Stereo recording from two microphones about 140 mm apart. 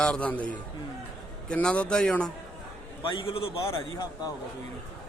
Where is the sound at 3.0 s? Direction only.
40° left (ahead or behind).